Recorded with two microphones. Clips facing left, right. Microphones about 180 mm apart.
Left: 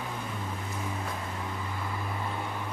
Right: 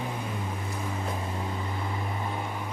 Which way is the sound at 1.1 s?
25° right (ahead or behind).